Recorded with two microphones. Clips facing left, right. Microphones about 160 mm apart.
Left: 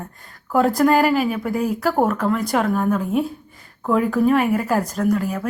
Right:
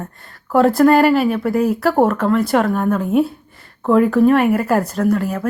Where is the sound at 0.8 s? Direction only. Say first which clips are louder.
Right 5 dB; 5° left (ahead or behind).